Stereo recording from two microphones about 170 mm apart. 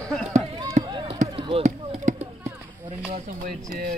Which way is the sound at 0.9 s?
30° right (ahead or behind).